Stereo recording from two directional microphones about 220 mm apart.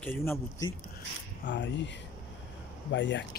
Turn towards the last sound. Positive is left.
turn(degrees=55)  # may be behind; listen again after turning